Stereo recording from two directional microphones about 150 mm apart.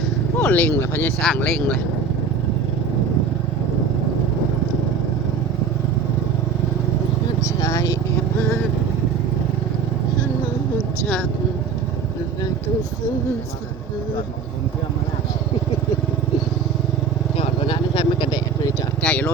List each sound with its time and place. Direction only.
0.4 s speech: 10° left (ahead or behind)
1.2 s speech: 5° left (ahead or behind)
7.6 s vehicle: 20° left (ahead or behind)
17.3 s vehicle: 35° left (ahead or behind)
19.0 s vehicle: 10° left (ahead or behind)